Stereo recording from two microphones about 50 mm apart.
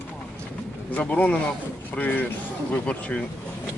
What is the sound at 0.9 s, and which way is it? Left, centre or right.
Speech, left.